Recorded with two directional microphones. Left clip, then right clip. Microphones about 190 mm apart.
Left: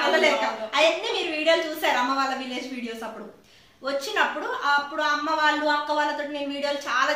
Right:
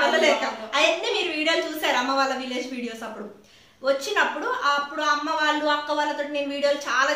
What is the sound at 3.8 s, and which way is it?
A woman's voice, 15° right (ahead or behind).